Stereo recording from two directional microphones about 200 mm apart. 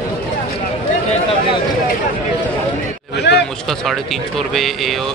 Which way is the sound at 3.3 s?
60° left (ahead or behind).